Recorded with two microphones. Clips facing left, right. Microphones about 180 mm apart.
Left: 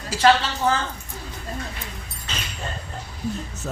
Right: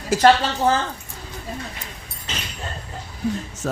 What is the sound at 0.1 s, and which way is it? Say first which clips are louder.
Speech: right 4 dB; 50° right (ahead or behind).